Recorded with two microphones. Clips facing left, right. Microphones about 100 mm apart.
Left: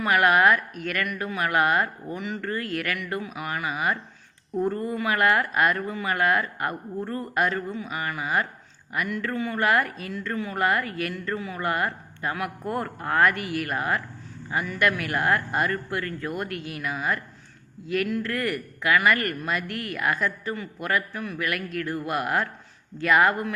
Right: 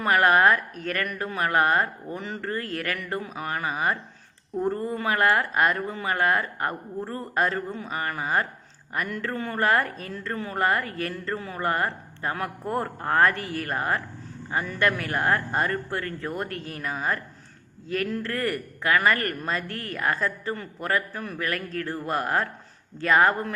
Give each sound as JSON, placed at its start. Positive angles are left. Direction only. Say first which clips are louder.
{"t": 0.0, "sound": "speech", "louder": "even", "side_deg": -35}